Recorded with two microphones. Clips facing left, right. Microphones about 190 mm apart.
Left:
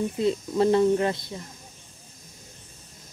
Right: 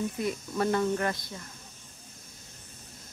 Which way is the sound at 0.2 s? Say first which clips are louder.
Left 9 dB; 25° left (ahead or behind).